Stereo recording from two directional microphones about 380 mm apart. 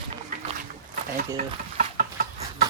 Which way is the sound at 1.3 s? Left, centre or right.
Centre.